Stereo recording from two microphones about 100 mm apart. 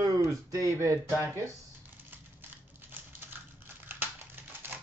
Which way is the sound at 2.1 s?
20° right (ahead or behind).